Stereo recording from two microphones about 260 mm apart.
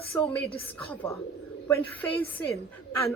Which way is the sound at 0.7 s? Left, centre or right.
Centre.